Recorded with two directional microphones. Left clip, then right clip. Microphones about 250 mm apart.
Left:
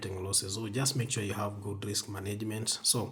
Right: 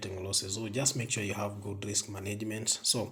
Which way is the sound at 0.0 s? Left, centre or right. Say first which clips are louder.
Even; centre.